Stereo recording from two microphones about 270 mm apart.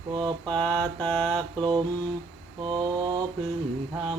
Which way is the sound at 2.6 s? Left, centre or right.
Centre.